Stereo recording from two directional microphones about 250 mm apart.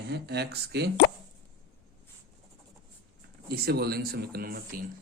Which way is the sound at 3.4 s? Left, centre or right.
Right.